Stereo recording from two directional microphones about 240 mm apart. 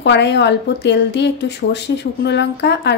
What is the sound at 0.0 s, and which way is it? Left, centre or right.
A woman's voice, left.